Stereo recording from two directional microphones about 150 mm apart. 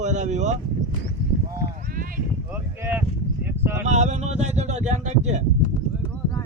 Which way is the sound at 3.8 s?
50° right (ahead or behind).